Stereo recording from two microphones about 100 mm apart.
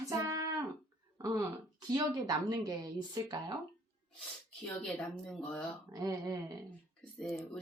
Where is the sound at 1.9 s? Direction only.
40° right (ahead or behind).